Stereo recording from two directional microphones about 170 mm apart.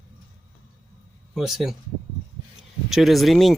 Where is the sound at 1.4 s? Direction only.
Centre (ahead or behind).